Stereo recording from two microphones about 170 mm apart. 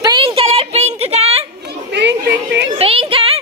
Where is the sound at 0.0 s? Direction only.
30° right (ahead or behind).